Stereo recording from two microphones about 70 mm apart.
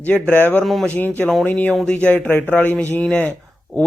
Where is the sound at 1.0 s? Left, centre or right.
Left.